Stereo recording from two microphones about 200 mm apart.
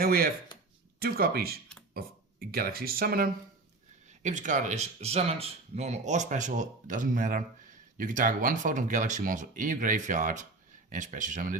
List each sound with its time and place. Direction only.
0.0 s speech: 50° right (ahead or behind)
4.2 s speech: 35° right (ahead or behind)